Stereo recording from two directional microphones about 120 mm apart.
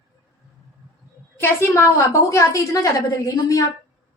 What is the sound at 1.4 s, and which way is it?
A woman's voice, 20° left (ahead or behind).